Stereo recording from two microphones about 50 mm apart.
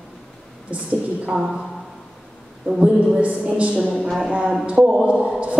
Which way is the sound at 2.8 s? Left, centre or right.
Right.